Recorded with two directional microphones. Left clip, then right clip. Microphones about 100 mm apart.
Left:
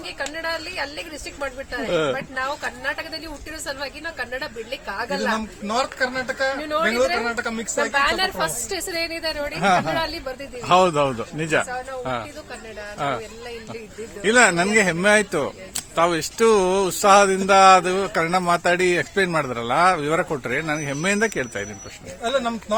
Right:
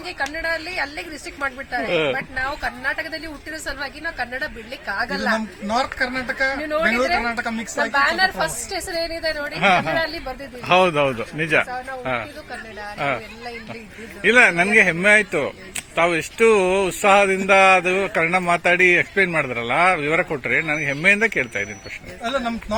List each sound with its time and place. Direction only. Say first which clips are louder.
0.2 s a woman's voice: right 3 dB; 35° left (ahead or behind)
9.8 s a woman's voice: right 2 dB; 35° left (ahead or behind)
10.1 s speech: even; 25° left (ahead or behind)
10.8 s a man's voice: right 1 dB; 5° left (ahead or behind)
14.2 s a woman's voice: right 2 dB; 20° left (ahead or behind)